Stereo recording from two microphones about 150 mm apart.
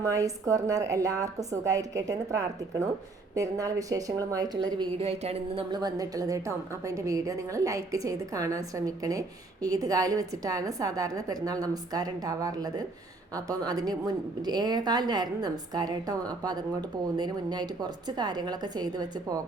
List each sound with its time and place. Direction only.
0.0 s a woman's voice: 20° right (ahead or behind)
5.0 s a sound: 40° right (ahead or behind)
5.7 s a woman's voice: 25° right (ahead or behind)